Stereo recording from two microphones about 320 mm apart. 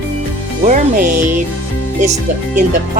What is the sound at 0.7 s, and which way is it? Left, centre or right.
Speech, right.